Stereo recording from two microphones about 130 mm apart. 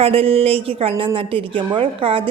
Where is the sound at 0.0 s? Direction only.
45° right (ahead or behind).